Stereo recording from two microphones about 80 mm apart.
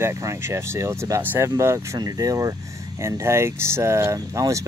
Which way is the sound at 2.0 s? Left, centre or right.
Right.